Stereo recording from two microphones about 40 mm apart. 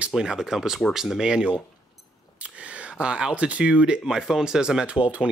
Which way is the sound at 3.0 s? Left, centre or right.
Right.